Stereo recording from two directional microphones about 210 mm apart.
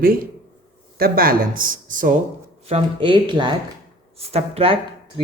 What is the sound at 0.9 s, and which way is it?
Speech, 45° right (ahead or behind).